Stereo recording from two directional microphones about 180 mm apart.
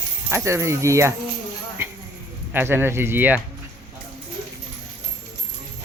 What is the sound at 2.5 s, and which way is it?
Speech, 10° right (ahead or behind).